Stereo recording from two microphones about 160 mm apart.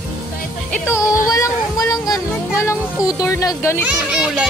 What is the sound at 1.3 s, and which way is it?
Speech, 20° left (ahead or behind).